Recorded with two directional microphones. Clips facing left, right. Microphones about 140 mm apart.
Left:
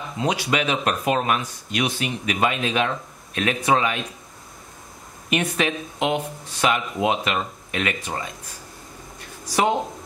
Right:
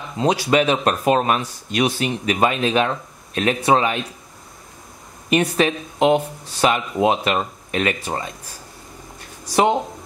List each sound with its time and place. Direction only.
0.2 s speech: 35° right (ahead or behind)
5.3 s speech: 35° right (ahead or behind)